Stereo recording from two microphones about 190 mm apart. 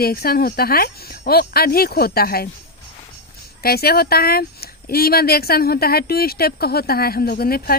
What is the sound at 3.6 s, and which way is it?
Speech, 55° left (ahead or behind).